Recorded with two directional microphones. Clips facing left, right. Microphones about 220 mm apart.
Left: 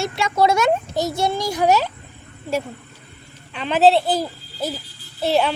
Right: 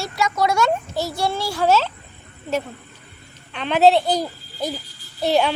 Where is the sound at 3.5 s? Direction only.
Centre (ahead or behind).